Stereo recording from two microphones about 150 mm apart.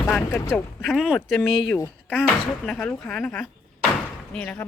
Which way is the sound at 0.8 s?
Centre (ahead or behind).